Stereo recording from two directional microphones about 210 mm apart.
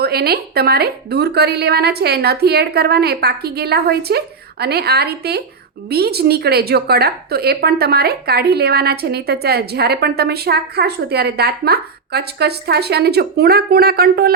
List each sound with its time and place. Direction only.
0.0 s a woman's voice: 50° right (ahead or behind)